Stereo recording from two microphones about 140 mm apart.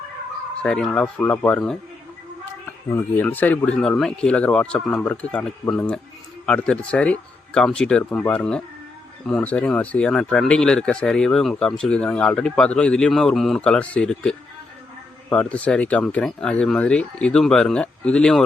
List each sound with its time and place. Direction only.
0.6 s speech: 5° left (ahead or behind)
3.0 s speech: 15° left (ahead or behind)